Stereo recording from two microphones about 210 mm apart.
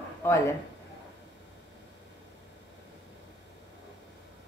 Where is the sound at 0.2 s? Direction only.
15° left (ahead or behind).